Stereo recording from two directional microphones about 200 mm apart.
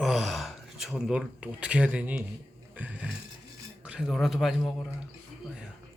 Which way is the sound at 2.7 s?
10° right (ahead or behind).